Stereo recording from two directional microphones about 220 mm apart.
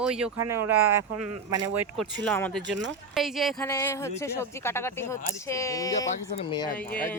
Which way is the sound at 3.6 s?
15° left (ahead or behind).